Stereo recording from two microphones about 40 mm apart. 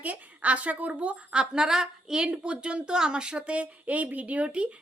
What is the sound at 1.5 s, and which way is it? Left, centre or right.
A woman's voice, centre.